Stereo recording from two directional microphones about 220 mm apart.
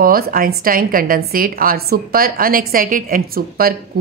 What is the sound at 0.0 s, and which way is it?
A woman's voice, 40° right (ahead or behind).